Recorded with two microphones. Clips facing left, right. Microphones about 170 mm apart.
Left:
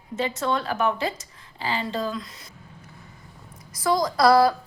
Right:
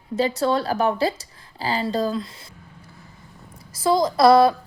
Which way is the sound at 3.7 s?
25° right (ahead or behind).